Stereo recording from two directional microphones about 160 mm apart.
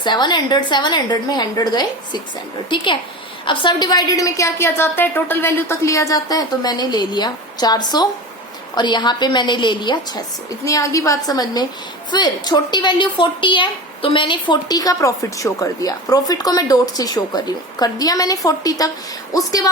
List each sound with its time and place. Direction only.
0.0 s a woman's voice: 25° left (ahead or behind)